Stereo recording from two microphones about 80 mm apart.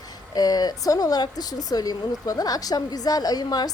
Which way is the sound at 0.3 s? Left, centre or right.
Left.